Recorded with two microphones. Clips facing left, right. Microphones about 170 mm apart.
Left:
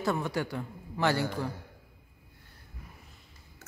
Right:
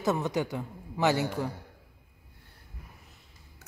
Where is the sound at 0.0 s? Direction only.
20° right (ahead or behind).